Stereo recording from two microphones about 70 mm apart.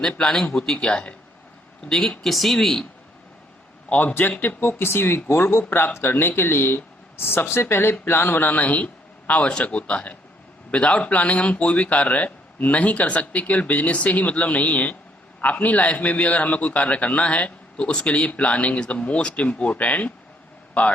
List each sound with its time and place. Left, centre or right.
0.2 s a man's voice: centre
3.8 s a man's voice: left
4.1 s a man's voice: left